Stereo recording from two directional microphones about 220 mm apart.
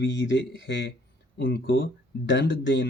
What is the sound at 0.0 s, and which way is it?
Speech, 55° left (ahead or behind).